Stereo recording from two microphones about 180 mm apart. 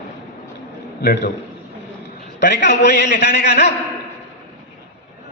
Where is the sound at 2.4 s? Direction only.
75° left (ahead or behind).